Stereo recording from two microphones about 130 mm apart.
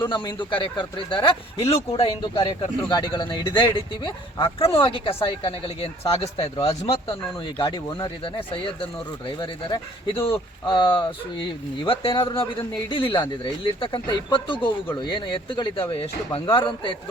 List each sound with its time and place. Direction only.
0.1 s speech: 40° left (ahead or behind)
2.4 s speech: 35° left (ahead or behind); by 6.7 s 50° left (ahead or behind)
7.9 s speech: 40° left (ahead or behind)